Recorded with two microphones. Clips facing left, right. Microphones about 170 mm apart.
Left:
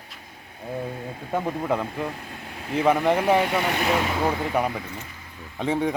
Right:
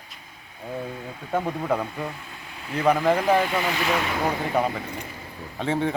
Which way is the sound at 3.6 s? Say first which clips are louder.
Left 1 dB; 50° left (ahead or behind).